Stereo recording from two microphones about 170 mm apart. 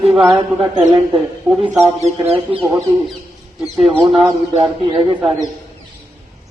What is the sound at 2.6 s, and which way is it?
Speech, 15° right (ahead or behind).